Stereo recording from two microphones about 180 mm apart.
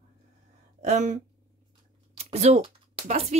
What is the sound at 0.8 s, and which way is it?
Speech, 40° right (ahead or behind).